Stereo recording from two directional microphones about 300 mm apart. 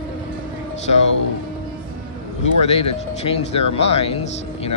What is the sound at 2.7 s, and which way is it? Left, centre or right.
Speech, centre.